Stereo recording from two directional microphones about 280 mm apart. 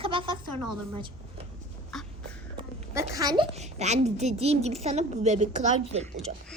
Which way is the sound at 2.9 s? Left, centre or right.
Centre.